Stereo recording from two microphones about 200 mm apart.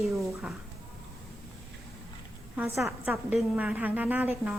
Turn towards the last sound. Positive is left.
turn(degrees=-5)  # may be behind; listen again after turning